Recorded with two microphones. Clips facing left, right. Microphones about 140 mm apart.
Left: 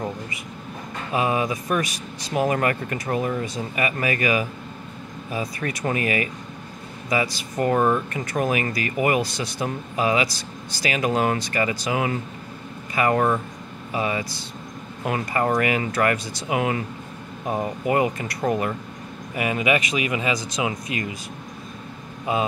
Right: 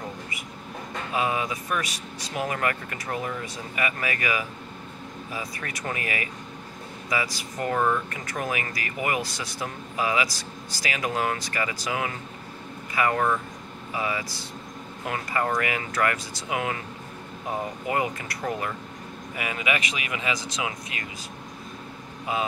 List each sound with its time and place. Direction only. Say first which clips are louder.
1.1 s speech: left 4 dB; 35° left (ahead or behind)
17.8 s speech: left 7 dB; 30° left (ahead or behind)